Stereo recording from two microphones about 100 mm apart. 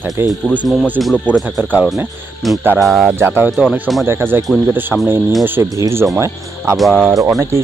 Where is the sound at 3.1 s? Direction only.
20° right (ahead or behind).